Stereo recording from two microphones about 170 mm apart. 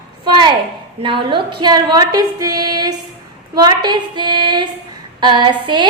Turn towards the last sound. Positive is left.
turn(degrees=-25)  # may be behind; listen again after turning